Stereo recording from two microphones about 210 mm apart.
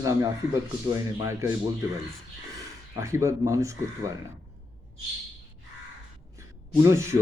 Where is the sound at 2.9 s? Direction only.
15° right (ahead or behind).